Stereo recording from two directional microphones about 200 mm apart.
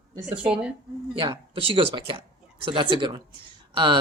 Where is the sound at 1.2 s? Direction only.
25° right (ahead or behind).